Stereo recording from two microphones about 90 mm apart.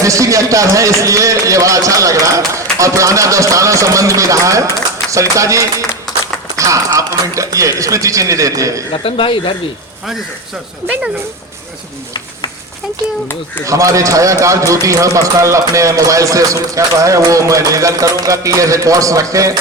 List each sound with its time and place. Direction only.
0.0 s a man's voice: 35° right (ahead or behind)
8.9 s speech: 85° left
13.7 s a man's voice: 35° right (ahead or behind)